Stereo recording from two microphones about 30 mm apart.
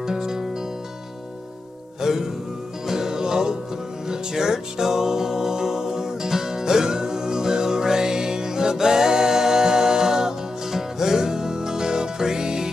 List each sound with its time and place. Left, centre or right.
0.0 s music: centre
2.0 s music: centre